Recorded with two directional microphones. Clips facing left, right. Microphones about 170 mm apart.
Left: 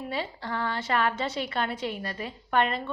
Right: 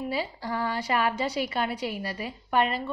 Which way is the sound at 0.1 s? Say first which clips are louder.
Right 2 dB; 5° right (ahead or behind).